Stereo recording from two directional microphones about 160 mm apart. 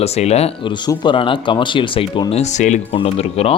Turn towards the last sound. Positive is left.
turn(degrees=40)  # may be behind; listen again after turning